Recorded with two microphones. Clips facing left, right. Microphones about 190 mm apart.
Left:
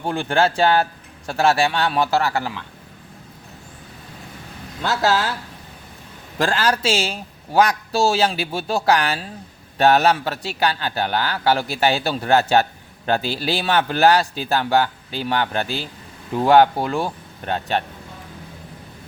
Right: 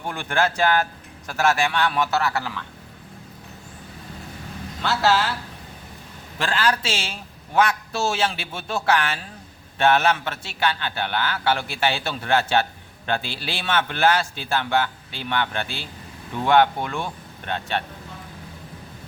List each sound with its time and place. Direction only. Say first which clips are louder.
0.0 s a man's voice: left 4 dB; 30° left (ahead or behind)
4.8 s a man's voice: left 1 dB; 40° left (ahead or behind)
6.4 s a man's voice: left 4 dB; 40° left (ahead or behind)